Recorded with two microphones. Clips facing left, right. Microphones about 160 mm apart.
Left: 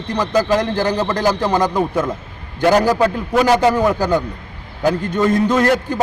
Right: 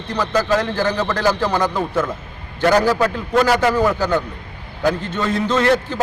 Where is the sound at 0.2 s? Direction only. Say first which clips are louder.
Left 2 dB; 15° left (ahead or behind).